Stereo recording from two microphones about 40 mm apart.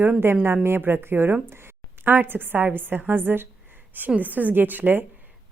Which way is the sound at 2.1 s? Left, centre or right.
Right.